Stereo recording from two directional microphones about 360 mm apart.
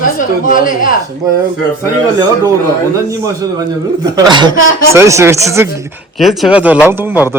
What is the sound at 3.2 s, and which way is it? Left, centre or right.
A man's voice, centre.